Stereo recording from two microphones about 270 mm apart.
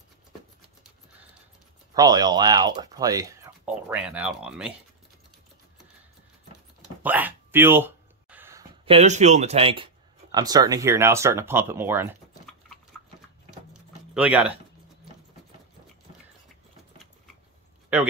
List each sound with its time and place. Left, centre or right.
2.0 s speech: centre
7.0 s a sound: centre
8.8 s speech: right; by 12.7 s centre
14.1 s speech: centre